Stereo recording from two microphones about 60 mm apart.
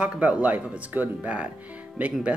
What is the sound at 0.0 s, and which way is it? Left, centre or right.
Speech, right.